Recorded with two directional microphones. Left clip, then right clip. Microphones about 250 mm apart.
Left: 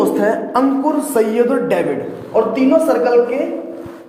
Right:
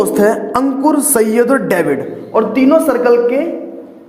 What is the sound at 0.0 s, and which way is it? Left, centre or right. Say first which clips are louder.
A man's voice: right 3 dB; right.